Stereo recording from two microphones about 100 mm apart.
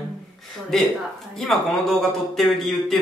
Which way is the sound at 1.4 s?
Centre (ahead or behind).